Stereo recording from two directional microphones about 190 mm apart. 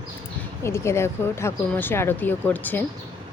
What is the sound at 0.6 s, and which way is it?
Speech, 15° left (ahead or behind).